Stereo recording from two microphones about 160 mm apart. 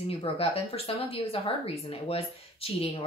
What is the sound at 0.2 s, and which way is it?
Speech, 35° left (ahead or behind).